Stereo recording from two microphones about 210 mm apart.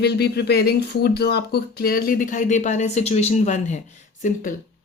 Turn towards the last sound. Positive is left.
turn(degrees=40)  # may be behind; listen again after turning